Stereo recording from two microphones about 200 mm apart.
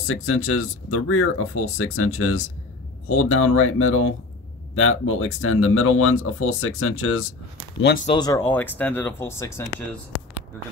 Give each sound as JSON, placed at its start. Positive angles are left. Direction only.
{"t": 0.0, "sound": "speech", "side_deg": 90}
{"t": 8.1, "sound": "speech", "side_deg": 20}